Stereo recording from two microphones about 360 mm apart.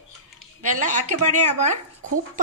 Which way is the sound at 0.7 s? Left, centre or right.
Centre.